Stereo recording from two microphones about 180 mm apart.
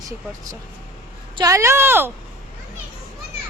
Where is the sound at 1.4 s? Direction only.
15° right (ahead or behind).